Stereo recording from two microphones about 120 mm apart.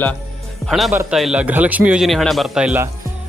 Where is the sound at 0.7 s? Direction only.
Centre (ahead or behind).